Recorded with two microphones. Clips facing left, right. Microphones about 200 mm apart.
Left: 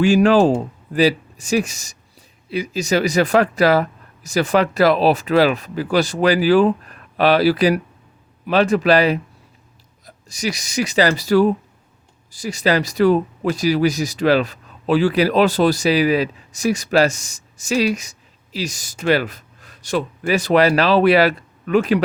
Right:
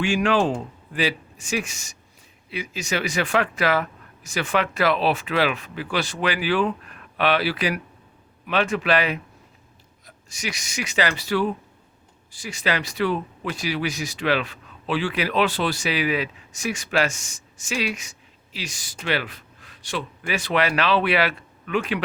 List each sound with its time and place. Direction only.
0.0 s speech: 40° left (ahead or behind)